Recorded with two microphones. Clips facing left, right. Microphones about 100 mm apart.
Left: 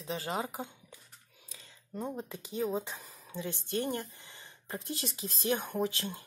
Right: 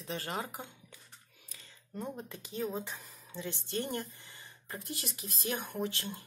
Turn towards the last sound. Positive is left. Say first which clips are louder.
# left 3 dB
turn(degrees=15)  # may be behind; listen again after turning